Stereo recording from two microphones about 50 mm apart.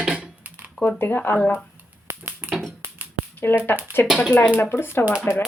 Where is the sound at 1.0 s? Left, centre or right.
Left.